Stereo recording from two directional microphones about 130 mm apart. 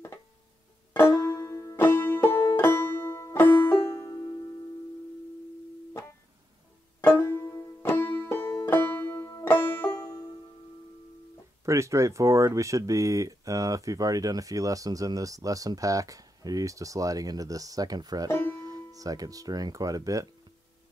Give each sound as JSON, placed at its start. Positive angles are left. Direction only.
{"t": 0.9, "sound": "banjo", "side_deg": 15}
{"t": 7.0, "sound": "banjo", "side_deg": 15}
{"t": 11.6, "sound": "speech", "side_deg": -20}